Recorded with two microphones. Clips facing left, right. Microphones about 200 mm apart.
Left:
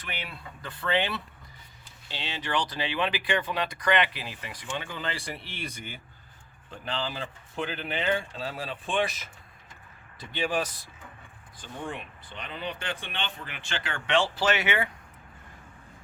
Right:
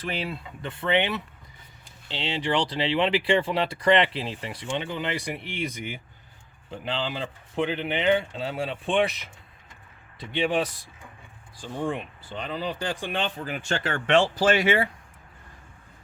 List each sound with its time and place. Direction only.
0.1 s speech: 30° right (ahead or behind)
10.3 s speech: 25° right (ahead or behind)
11.6 s speech: 30° right (ahead or behind)